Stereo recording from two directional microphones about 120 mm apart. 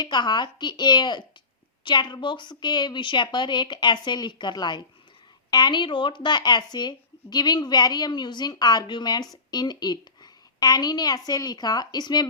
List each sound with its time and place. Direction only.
0.0 s speech: 35° left (ahead or behind)